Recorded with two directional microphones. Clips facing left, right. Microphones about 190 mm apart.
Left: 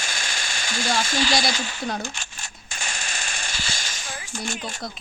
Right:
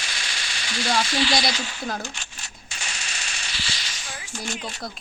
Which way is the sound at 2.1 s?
50° left (ahead or behind).